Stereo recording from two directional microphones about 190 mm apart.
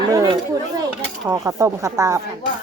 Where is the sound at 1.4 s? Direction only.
15° right (ahead or behind).